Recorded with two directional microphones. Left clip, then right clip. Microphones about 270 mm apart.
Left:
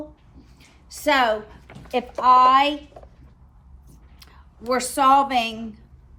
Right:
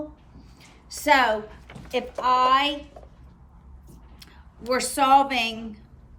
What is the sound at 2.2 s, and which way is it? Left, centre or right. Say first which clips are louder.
Speech: left 5 dB; centre.